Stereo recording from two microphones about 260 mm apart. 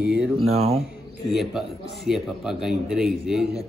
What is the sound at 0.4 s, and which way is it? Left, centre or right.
Speech, right.